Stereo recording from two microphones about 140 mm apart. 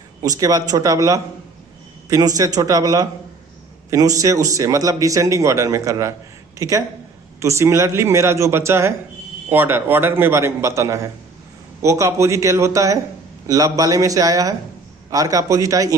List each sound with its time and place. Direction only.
0.2 s a man's voice: 25° right (ahead or behind)